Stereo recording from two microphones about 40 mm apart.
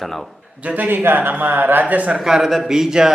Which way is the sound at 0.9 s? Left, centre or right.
Right.